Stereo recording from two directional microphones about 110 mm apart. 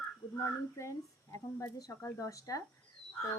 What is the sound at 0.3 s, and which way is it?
Speech, 25° left (ahead or behind).